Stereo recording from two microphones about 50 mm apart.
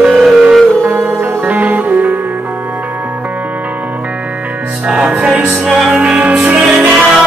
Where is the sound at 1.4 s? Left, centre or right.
Right.